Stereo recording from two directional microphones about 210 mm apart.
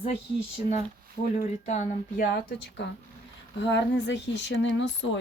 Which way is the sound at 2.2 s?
55° left (ahead or behind).